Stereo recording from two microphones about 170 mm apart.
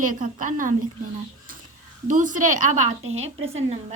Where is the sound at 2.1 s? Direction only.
50° right (ahead or behind).